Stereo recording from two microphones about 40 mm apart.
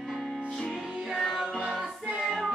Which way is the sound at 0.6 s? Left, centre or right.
Centre.